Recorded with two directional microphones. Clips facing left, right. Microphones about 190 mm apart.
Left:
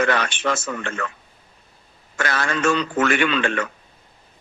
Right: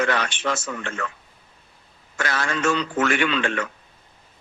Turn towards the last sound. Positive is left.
turn(degrees=60)  # may be behind; listen again after turning